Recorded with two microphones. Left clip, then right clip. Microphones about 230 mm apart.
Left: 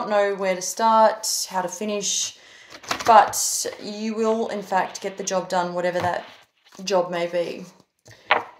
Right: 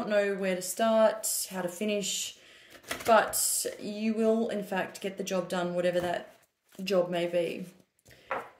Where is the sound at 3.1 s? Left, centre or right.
Centre.